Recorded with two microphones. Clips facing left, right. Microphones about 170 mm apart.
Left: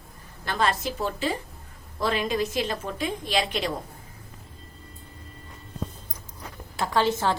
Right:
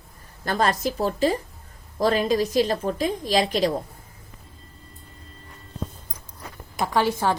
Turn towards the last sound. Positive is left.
turn(degrees=-10)  # may be behind; listen again after turning